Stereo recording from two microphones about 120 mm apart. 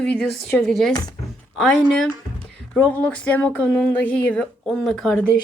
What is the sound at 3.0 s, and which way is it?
Speech, 15° left (ahead or behind).